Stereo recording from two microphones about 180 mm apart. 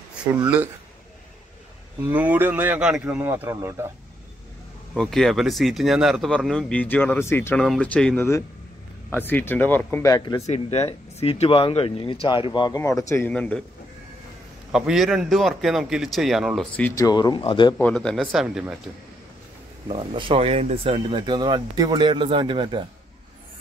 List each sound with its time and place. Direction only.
2.0 s speech: 10° right (ahead or behind)
4.9 s speech: 5° left (ahead or behind); by 10.4 s 20° left (ahead or behind)
10.4 s speech: 35° left (ahead or behind); by 13.6 s 5° left (ahead or behind)
14.7 s speech: 5° right (ahead or behind)
16.9 s speech: 20° left (ahead or behind)
17.7 s speech: 5° left (ahead or behind)
19.9 s speech: 30° right (ahead or behind)